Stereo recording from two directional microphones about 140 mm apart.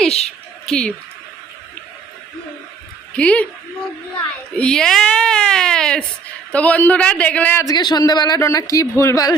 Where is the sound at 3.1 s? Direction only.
10° left (ahead or behind).